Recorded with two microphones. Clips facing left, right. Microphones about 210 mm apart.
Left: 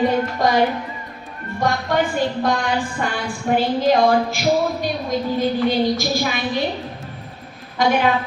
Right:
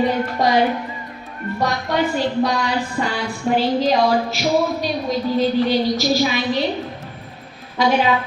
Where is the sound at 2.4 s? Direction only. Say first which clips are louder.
Right 1 dB; 50° left (ahead or behind).